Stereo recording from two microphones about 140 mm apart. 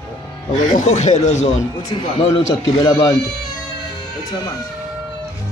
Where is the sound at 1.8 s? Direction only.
25° left (ahead or behind).